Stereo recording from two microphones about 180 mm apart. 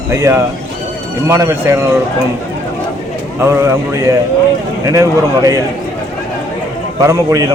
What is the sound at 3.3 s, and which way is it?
Speech, 15° right (ahead or behind).